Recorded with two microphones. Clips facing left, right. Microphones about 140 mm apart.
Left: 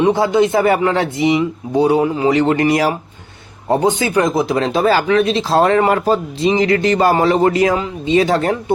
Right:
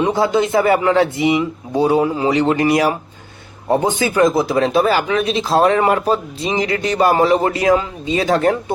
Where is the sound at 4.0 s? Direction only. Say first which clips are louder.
Right 1 dB; 25° left (ahead or behind); by 6.8 s 45° left (ahead or behind).